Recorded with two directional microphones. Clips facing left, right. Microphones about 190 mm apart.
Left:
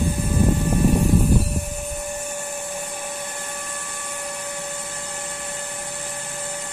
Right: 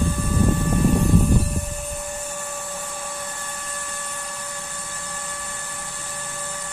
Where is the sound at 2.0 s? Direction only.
15° left (ahead or behind).